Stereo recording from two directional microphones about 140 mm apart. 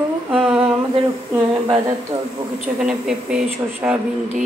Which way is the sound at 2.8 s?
5° right (ahead or behind).